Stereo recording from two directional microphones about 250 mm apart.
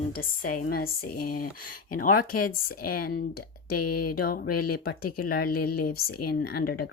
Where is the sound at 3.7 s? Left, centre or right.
Left.